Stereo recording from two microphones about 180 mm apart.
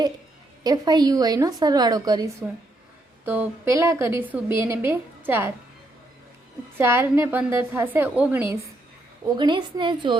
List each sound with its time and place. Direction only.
0.6 s a woman's voice: 20° right (ahead or behind)
3.2 s a woman's voice: 10° right (ahead or behind)
6.7 s a woman's voice: 15° right (ahead or behind)
9.4 s a woman's voice: 25° right (ahead or behind)